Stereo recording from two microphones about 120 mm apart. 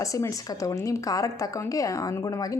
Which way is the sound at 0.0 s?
30° left (ahead or behind).